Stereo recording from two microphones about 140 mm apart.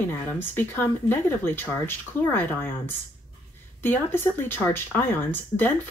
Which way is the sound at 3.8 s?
15° left (ahead or behind).